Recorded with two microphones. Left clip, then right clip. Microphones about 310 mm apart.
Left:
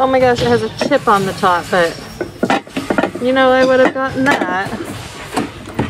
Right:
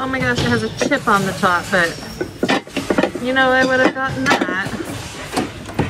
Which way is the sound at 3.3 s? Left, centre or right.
Centre.